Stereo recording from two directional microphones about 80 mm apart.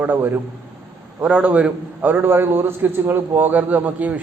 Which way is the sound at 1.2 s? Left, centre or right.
Centre.